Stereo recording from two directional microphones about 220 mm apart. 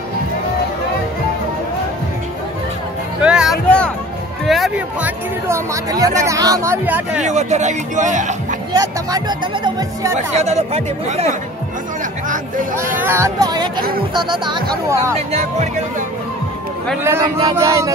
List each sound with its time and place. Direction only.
3.2 s music: 5° right (ahead or behind)
4.5 s speech: centre (ahead or behind)
7.2 s speech: 30° right (ahead or behind)
8.7 s speech: 15° right (ahead or behind)
10.1 s speech: 30° right (ahead or behind)
13.0 s speech: 10° right (ahead or behind)
15.1 s speech: 30° right (ahead or behind)
17.0 s speech: 10° right (ahead or behind)